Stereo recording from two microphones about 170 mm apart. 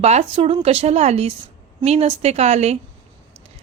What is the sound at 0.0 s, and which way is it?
Speech, 40° right (ahead or behind).